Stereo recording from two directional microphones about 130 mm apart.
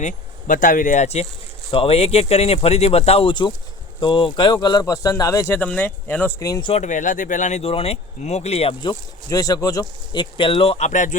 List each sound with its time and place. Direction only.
0.0 s speech: 90° left; by 1.3 s 60° left (ahead or behind)
1.7 s speech: 45° left (ahead or behind); by 6.3 s 15° left (ahead or behind)
6.6 s speech: 45° left (ahead or behind)
6.8 s speech: 80° left
7.6 s speech: 50° left (ahead or behind)
8.8 s speech: 30° left (ahead or behind)
10.1 s speech: 40° left (ahead or behind); by 11.2 s 70° left (ahead or behind)